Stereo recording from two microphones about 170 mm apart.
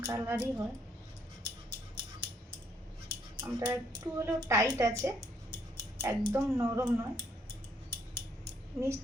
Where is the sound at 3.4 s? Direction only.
15° right (ahead or behind).